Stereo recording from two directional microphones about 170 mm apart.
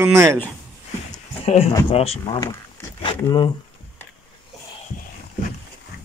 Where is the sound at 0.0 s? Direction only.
15° right (ahead or behind).